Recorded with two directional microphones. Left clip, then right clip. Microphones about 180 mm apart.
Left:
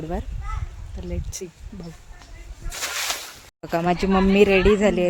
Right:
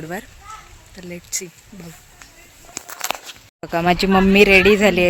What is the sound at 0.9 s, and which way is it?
Speech, 5° left (ahead or behind).